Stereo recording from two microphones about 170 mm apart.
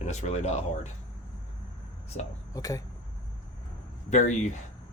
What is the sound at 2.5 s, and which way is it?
Speech, 20° left (ahead or behind).